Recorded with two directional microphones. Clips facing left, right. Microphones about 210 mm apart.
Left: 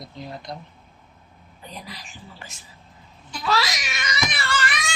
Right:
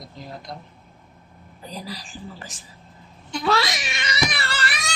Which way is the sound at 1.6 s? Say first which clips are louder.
Right 5 dB; 35° right (ahead or behind).